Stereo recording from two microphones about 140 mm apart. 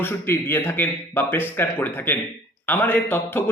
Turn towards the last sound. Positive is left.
turn(degrees=15)  # may be behind; listen again after turning